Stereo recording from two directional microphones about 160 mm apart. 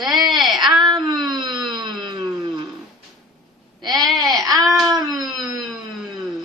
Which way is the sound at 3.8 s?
25° right (ahead or behind).